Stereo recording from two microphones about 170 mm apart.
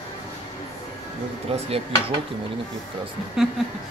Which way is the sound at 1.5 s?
35° right (ahead or behind).